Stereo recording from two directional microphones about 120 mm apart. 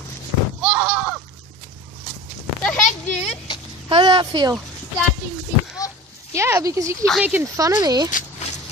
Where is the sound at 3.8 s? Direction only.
40° right (ahead or behind).